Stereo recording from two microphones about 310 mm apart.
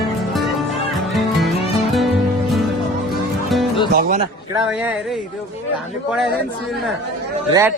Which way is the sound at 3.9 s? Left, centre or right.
Right.